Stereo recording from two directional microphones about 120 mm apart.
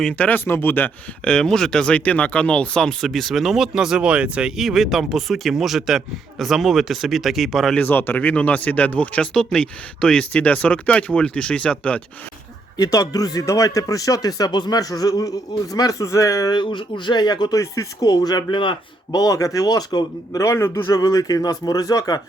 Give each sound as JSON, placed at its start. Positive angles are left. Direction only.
{"t": 0.0, "sound": "speech", "side_deg": 10}
{"t": 7.8, "sound": "speech", "side_deg": 15}
{"t": 12.7, "sound": "speech", "side_deg": 30}